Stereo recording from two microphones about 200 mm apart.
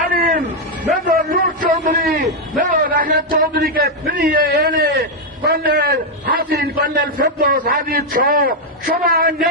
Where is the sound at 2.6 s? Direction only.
45° right (ahead or behind).